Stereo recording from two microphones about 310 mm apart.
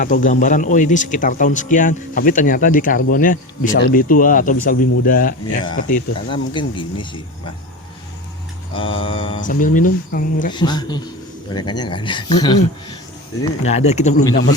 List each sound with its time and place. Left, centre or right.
0.0 s speech: left
9.0 s speech: centre
10.5 s speech: centre